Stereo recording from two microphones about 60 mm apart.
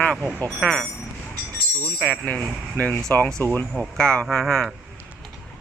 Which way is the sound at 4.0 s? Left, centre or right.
Centre.